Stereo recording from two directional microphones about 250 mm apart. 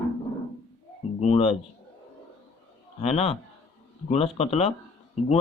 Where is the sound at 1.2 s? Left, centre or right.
Left.